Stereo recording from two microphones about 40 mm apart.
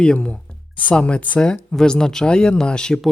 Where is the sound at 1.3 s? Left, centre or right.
Centre.